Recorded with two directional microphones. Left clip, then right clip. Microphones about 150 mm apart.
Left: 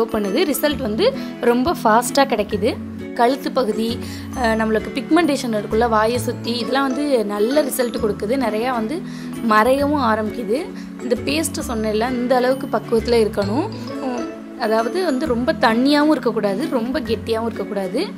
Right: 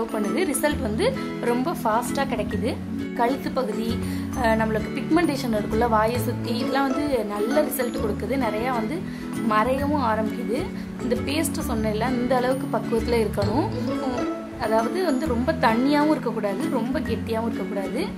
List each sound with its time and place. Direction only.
0.1 s a woman's voice: 30° left (ahead or behind)
14.6 s a woman's voice: 30° left (ahead or behind)